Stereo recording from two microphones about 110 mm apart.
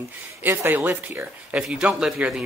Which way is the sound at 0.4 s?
20° right (ahead or behind).